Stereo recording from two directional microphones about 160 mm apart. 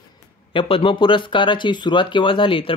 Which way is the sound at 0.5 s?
35° left (ahead or behind).